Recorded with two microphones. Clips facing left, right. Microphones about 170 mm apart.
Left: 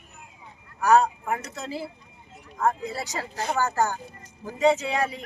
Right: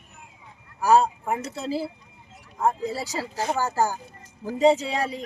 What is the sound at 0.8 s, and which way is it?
Speech, 30° right (ahead or behind).